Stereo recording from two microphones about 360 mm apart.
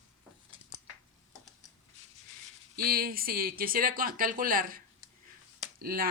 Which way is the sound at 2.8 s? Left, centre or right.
Right.